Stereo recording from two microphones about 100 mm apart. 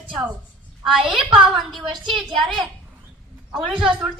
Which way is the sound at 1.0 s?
60° right (ahead or behind).